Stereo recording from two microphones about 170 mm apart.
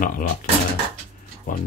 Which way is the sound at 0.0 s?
50° left (ahead or behind).